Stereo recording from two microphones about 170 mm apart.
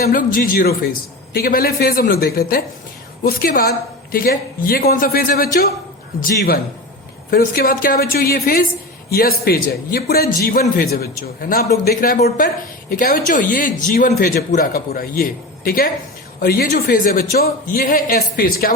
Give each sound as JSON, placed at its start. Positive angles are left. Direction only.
{"t": 0.0, "sound": "a man's voice", "side_deg": 55}